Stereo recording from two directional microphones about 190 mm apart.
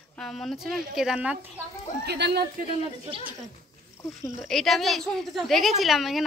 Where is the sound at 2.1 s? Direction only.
60° right (ahead or behind).